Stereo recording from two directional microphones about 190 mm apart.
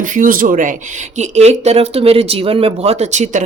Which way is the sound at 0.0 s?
45° right (ahead or behind).